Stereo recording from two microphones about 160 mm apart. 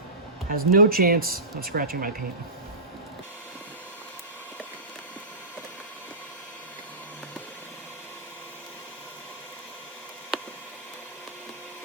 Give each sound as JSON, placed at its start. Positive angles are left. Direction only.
{"t": 0.4, "sound": "speech", "side_deg": -65}